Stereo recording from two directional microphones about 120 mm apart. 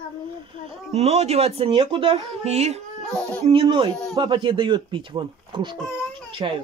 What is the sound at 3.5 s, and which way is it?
A child's voice, 45° right (ahead or behind).